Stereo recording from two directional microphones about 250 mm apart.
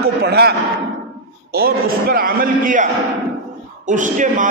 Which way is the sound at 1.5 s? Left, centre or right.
Right.